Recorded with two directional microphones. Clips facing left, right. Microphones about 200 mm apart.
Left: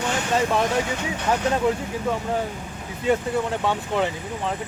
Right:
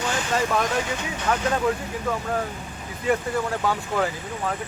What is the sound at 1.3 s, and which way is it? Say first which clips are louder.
Speech: left 1 dB; 20° left (ahead or behind).